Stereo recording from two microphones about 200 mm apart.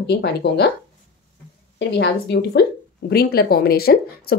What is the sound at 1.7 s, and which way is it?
Speech, 60° left (ahead or behind).